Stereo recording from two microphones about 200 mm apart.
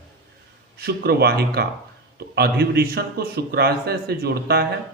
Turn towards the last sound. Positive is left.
turn(degrees=-50)  # may be behind; listen again after turning